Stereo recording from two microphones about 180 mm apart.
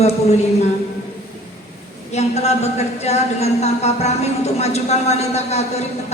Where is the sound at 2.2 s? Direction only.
35° left (ahead or behind).